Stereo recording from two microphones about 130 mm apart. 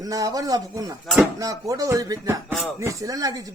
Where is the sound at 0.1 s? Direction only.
25° right (ahead or behind).